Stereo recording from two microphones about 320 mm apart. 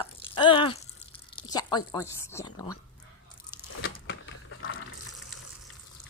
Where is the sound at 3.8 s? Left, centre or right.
Left.